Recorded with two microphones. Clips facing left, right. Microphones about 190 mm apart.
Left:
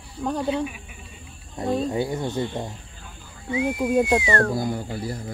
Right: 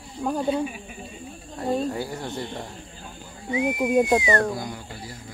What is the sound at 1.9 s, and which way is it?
Speech, 20° left (ahead or behind).